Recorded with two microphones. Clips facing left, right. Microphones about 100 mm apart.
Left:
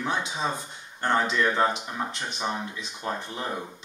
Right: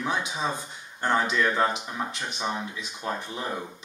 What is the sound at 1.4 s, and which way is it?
Speech, 15° left (ahead or behind).